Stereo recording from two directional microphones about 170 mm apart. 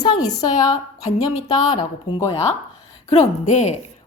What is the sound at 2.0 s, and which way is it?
Speech, 25° left (ahead or behind).